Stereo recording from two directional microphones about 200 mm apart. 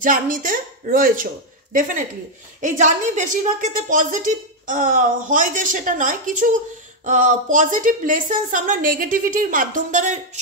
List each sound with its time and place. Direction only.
0.0 s a woman's voice: 40° right (ahead or behind)